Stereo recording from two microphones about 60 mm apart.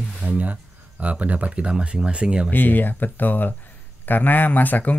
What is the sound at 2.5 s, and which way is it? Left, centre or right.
Speech, left.